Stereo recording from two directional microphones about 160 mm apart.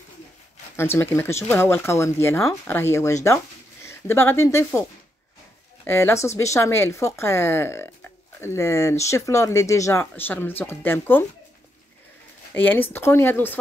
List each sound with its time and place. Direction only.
0.7 s speech: 15° left (ahead or behind)
5.9 s speech: 15° left (ahead or behind)
12.5 s speech: 10° left (ahead or behind)